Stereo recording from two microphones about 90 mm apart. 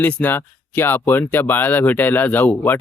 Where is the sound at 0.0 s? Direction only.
15° left (ahead or behind).